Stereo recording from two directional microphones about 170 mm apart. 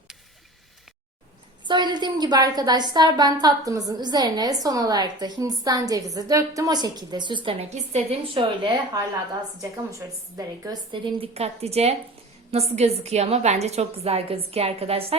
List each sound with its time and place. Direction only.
1.6 s a woman's voice: 25° right (ahead or behind)